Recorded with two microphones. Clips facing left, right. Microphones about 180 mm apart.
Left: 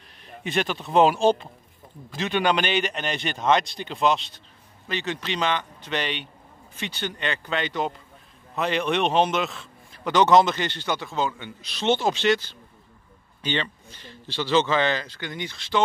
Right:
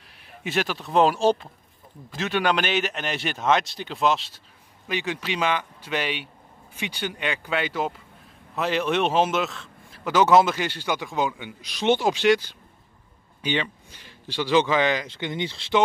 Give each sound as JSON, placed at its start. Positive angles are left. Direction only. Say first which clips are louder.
{"t": 0.4, "sound": "a man's voice", "louder": "even", "side_deg": -5}
{"t": 15.0, "sound": "speech", "louder": "right 4 dB", "side_deg": -25}